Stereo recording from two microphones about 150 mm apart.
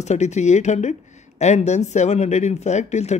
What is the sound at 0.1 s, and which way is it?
Speech, 50° left (ahead or behind).